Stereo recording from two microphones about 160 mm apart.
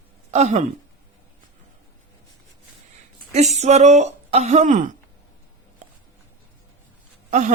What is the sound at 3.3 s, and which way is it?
Speech, 45° right (ahead or behind).